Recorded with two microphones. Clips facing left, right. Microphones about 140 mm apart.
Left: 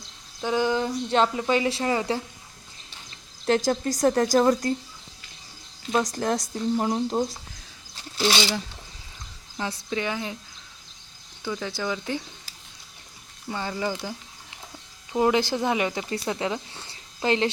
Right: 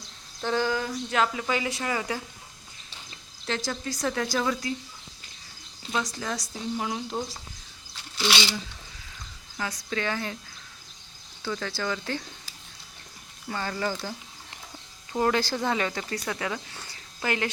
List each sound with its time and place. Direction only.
0.4 s speech: 15° left (ahead or behind)
3.4 s speech: 45° left (ahead or behind)
5.9 s speech: 45° left (ahead or behind)
9.6 s speech: 25° left (ahead or behind)
10.0 s speech: 15° left (ahead or behind)
11.4 s speech: 15° left (ahead or behind)
13.5 s speech: 15° left (ahead or behind)